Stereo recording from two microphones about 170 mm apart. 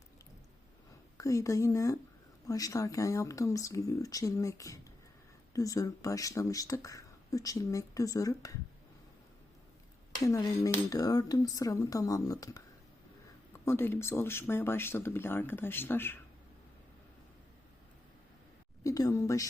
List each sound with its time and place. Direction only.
1.2 s speech: 20° left (ahead or behind)
10.2 s speech: 20° left (ahead or behind)
13.7 s speech: 15° left (ahead or behind)
18.8 s speech: 20° left (ahead or behind)